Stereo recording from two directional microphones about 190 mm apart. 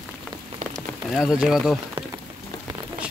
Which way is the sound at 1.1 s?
5° right (ahead or behind).